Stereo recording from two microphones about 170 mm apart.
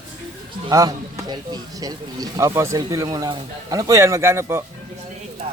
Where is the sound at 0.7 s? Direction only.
20° right (ahead or behind).